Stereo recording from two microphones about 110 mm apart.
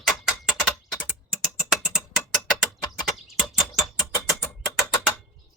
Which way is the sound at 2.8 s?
35° left (ahead or behind).